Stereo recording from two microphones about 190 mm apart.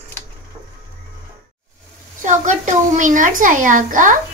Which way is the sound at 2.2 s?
40° right (ahead or behind).